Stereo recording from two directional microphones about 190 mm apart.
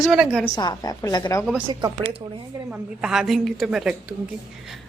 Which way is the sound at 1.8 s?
30° right (ahead or behind).